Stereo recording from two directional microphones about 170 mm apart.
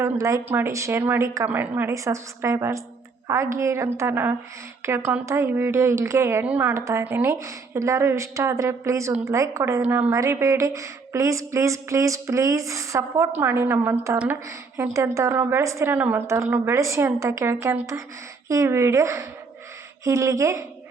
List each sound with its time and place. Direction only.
0.0 s speech: 20° right (ahead or behind)